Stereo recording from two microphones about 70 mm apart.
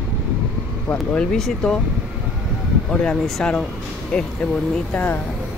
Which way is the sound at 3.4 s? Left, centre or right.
Centre.